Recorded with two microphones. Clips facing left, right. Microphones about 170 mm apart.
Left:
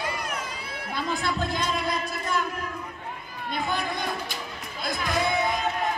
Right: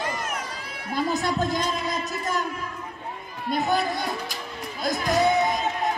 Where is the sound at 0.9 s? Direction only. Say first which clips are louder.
Right 4 dB; 40° right (ahead or behind).